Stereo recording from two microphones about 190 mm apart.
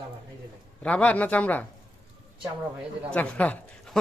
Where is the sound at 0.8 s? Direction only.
5° left (ahead or behind).